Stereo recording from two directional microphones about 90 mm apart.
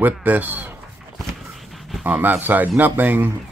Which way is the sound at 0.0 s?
20° right (ahead or behind).